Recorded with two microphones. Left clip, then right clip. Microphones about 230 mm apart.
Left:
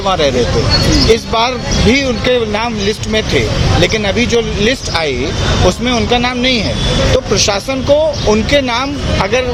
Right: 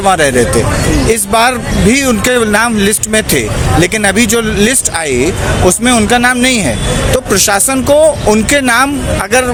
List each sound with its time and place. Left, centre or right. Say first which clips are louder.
0.0 s speech: right 3 dB; right